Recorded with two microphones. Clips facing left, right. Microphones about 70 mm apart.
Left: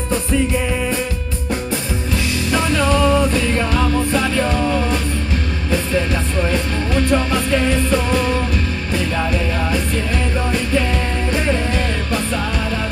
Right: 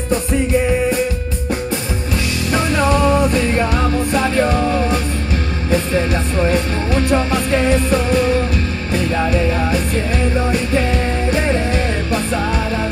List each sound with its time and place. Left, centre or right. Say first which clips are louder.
2.5 s music: right 1 dB; right
11.4 s music: right 2 dB; right